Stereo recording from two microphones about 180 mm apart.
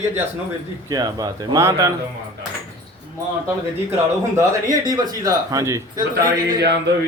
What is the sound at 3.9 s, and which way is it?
Speech, 15° right (ahead or behind).